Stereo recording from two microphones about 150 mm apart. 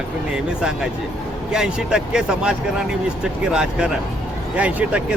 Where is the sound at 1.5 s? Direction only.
5° right (ahead or behind).